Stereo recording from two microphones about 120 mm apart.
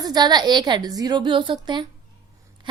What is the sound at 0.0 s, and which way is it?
A woman's voice, 35° right (ahead or behind).